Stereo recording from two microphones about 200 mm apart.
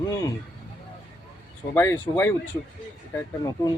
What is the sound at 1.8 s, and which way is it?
Speech, 10° left (ahead or behind).